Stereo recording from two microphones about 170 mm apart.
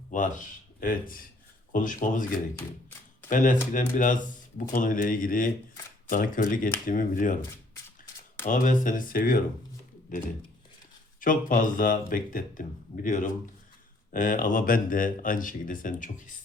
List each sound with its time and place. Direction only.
0.1 s speech: 50° left (ahead or behind)
8.4 s speech: 50° left (ahead or behind)
11.2 s speech: 55° left (ahead or behind)